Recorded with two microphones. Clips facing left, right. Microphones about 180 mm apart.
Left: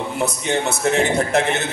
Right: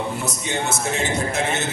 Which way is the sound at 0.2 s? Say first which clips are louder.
Left 5 dB; 60° left (ahead or behind).